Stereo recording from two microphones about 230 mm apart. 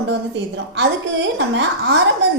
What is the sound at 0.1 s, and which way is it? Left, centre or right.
A woman's voice, right.